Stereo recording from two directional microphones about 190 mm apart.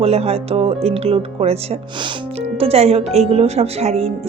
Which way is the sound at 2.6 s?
30° right (ahead or behind).